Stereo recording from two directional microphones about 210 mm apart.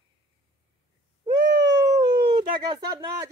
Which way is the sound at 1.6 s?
15° right (ahead or behind).